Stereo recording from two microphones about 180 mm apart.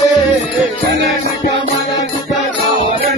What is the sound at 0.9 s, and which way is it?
Music, 70° right (ahead or behind).